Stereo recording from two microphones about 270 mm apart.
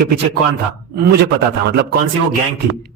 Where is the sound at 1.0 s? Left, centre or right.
Right.